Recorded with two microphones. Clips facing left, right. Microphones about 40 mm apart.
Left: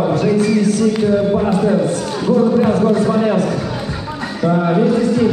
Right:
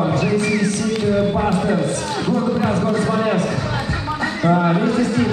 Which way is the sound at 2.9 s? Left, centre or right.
Centre.